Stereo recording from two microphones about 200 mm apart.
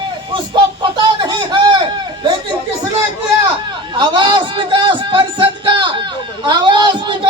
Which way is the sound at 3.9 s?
25° right (ahead or behind).